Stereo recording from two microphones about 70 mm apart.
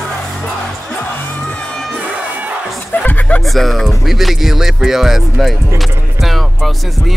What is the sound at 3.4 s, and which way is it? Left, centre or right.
Speech, centre.